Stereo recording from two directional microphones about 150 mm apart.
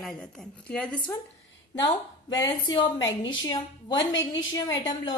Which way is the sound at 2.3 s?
25° left (ahead or behind).